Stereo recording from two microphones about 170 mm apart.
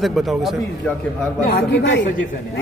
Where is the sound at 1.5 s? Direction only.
80° left.